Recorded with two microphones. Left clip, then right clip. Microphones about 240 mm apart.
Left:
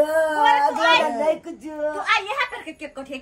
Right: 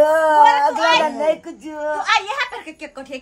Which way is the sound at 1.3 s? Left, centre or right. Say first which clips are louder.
Right 3 dB; centre.